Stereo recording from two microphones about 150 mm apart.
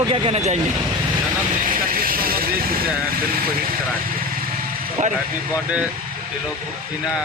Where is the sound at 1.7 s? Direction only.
70° right (ahead or behind).